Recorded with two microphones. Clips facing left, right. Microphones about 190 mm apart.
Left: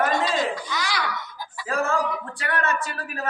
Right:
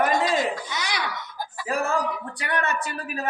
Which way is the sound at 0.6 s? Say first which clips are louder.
Left 2 dB; 20° right (ahead or behind).